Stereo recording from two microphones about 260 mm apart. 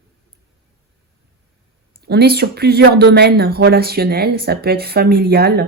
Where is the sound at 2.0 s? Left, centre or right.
Right.